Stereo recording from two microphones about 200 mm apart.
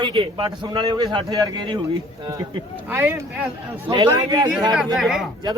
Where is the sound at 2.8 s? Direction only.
10° right (ahead or behind).